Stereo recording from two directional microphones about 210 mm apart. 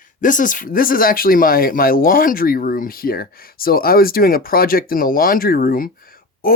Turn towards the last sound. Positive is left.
turn(degrees=45)  # may be behind; listen again after turning